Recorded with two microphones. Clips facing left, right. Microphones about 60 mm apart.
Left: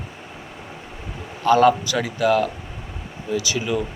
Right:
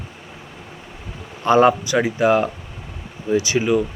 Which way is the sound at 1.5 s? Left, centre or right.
Right.